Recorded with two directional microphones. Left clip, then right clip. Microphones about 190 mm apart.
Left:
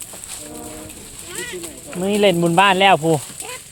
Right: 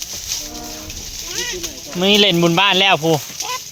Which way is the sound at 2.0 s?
10° right (ahead or behind).